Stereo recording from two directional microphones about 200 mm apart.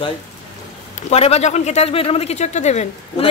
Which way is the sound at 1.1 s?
30° left (ahead or behind).